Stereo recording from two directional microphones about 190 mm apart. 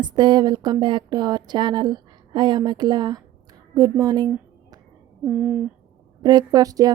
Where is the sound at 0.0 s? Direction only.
25° right (ahead or behind).